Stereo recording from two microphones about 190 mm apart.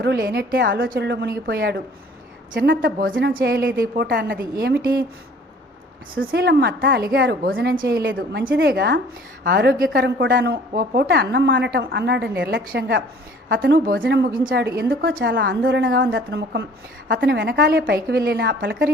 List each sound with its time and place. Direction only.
0.0 s a woman's voice: 60° right (ahead or behind)
2.8 s a woman's voice: 50° right (ahead or behind)
6.2 s a woman's voice: 60° right (ahead or behind)